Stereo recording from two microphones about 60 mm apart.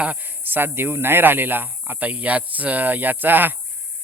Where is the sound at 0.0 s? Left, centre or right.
Right.